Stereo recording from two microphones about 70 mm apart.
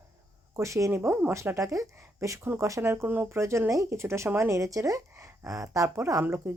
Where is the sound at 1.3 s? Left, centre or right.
Right.